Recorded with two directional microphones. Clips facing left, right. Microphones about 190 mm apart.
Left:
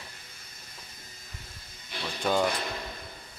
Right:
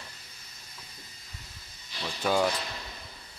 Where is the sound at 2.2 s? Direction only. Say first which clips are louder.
Even; 5° right (ahead or behind).